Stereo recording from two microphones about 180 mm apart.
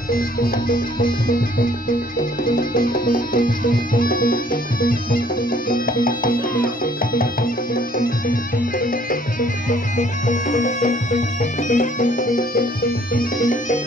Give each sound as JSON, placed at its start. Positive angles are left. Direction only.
{"t": 0.1, "sound": "music", "side_deg": 55}